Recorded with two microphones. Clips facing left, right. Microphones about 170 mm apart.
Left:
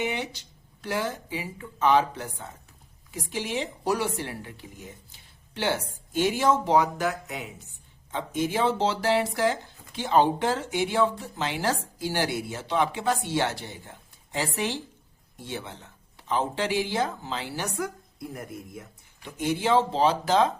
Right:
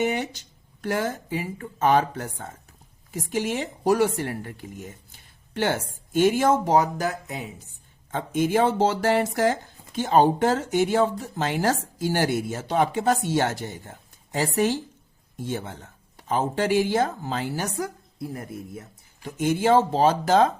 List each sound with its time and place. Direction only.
0.0 s speech: 45° right (ahead or behind)
8.1 s speech: 50° right (ahead or behind)
18.2 s a man's voice: 30° right (ahead or behind)
19.2 s speech: 45° right (ahead or behind)